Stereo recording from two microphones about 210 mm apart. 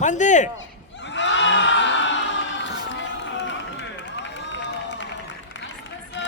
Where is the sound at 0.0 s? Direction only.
35° left (ahead or behind).